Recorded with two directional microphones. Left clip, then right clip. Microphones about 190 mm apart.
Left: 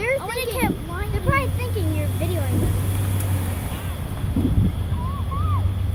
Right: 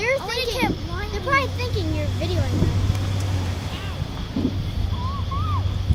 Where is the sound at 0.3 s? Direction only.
10° left (ahead or behind).